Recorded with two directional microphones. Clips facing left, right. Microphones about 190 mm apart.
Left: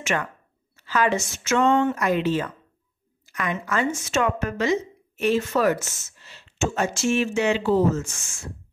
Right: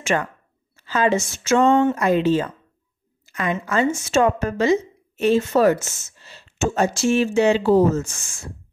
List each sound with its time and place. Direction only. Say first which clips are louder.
0.0 s a woman's voice: right 4 dB; 30° right (ahead or behind)